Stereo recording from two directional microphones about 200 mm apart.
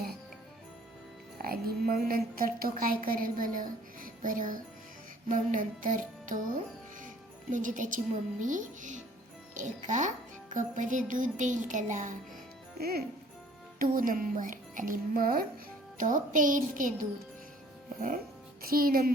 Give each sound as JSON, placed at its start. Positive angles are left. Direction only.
{"t": 1.4, "sound": "a woman's voice", "side_deg": -50}
{"t": 5.3, "sound": "music", "side_deg": -40}
{"t": 7.5, "sound": "music", "side_deg": -40}
{"t": 12.8, "sound": "a woman's voice", "side_deg": -50}
{"t": 16.0, "sound": "music", "side_deg": -40}
{"t": 18.6, "sound": "a woman's voice", "side_deg": -45}